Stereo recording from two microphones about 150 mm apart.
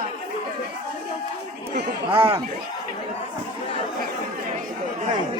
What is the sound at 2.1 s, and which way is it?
Speech, 35° right (ahead or behind).